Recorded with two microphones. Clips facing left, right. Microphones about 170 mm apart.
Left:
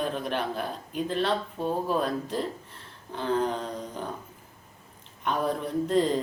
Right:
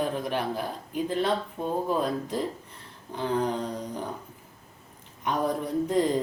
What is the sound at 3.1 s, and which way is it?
A man's voice, 15° right (ahead or behind).